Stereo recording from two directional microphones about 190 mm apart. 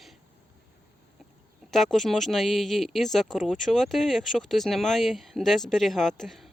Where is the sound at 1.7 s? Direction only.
Centre (ahead or behind).